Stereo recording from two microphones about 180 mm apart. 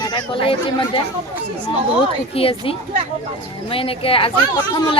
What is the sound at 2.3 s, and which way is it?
Speech, 30° left (ahead or behind).